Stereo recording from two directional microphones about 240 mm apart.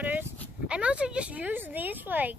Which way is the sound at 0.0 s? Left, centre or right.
Centre.